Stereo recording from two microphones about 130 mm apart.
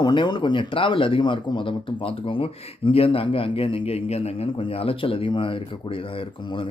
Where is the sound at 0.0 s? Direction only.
35° left (ahead or behind).